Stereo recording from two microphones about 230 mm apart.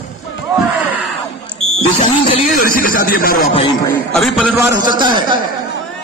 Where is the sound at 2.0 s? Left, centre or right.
Left.